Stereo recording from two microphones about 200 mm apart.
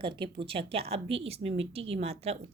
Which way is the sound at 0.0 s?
25° right (ahead or behind).